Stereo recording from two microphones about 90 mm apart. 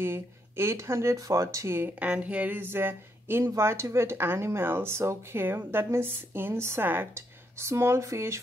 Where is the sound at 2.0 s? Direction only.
15° right (ahead or behind).